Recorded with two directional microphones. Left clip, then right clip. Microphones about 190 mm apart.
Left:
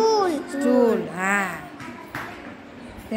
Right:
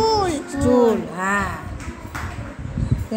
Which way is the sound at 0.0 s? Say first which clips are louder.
Right 1 dB; 15° right (ahead or behind).